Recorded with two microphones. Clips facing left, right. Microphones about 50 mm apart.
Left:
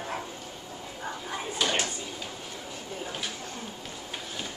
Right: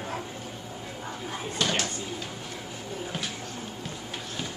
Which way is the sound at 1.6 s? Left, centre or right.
Centre.